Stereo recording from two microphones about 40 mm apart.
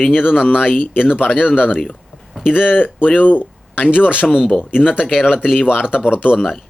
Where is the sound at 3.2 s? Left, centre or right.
Left.